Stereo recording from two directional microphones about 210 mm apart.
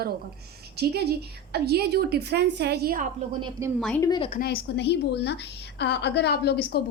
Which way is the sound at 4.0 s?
20° left (ahead or behind).